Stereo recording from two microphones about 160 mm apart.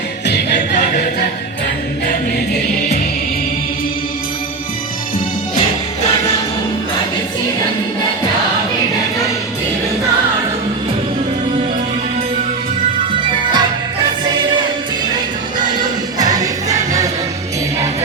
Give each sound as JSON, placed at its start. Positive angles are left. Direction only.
{"t": 0.5, "sound": "a capella", "side_deg": 50}
{"t": 13.1, "sound": "music", "side_deg": -30}
{"t": 15.5, "sound": "music", "side_deg": -50}
{"t": 16.1, "sound": "music", "side_deg": -25}